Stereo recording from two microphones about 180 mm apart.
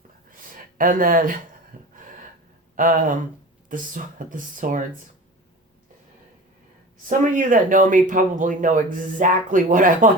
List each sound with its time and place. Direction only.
0.3 s a sound: 50° right (ahead or behind)
2.7 s speech: 50° right (ahead or behind)
7.3 s speech: 45° right (ahead or behind)